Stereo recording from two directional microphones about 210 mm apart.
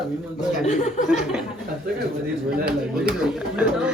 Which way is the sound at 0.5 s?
35° left (ahead or behind).